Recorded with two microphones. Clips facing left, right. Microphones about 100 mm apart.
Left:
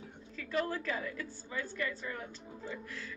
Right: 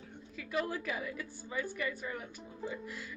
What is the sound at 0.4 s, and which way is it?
A woman's voice, 15° right (ahead or behind).